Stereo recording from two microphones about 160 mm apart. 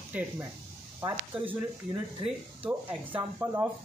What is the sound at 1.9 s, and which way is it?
Speech, 35° right (ahead or behind).